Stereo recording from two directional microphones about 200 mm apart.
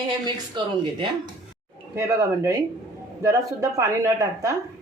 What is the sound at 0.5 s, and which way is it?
Speech, 20° right (ahead or behind).